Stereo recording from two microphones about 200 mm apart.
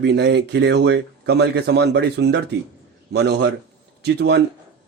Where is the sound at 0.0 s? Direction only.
60° right (ahead or behind).